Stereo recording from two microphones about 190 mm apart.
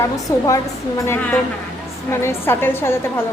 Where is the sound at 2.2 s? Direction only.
15° left (ahead or behind).